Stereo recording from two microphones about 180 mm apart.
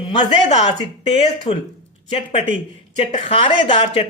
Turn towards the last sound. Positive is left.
turn(degrees=30)  # may be behind; listen again after turning